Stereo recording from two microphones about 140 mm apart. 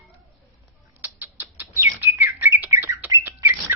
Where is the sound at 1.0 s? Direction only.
15° right (ahead or behind).